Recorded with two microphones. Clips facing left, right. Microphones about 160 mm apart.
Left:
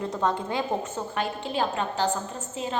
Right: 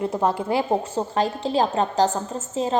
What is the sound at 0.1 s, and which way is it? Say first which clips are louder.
A woman's voice: right 5 dB; 25° right (ahead or behind).